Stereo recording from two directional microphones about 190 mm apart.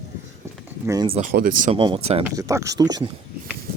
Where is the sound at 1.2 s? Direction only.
50° right (ahead or behind).